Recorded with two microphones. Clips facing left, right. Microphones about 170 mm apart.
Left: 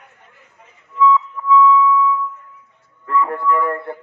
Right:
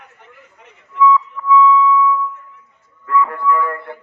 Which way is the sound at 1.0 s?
20° left (ahead or behind).